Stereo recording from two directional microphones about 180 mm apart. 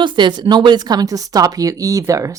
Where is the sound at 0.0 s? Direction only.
25° right (ahead or behind).